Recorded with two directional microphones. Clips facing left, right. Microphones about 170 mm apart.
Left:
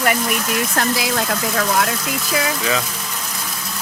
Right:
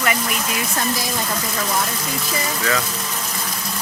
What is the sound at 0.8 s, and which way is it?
Speech, 90° left.